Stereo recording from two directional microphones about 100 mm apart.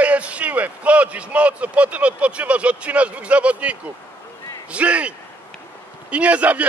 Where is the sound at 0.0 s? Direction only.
15° right (ahead or behind).